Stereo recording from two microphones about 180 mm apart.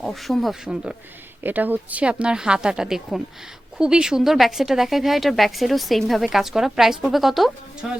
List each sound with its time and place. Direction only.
0.0 s speech: centre (ahead or behind)